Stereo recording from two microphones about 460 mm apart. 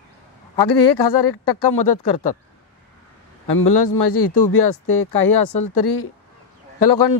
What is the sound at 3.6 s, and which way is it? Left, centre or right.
A man's voice, left.